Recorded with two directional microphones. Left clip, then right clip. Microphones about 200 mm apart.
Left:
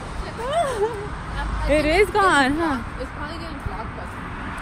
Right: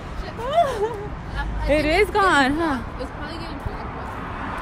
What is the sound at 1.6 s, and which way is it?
A woman's voice, 15° right (ahead or behind).